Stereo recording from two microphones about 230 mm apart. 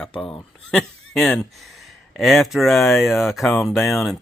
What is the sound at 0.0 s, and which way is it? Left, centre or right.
Speech, centre.